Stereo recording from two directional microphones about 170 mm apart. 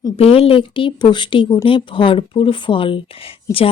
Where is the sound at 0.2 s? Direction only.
35° left (ahead or behind).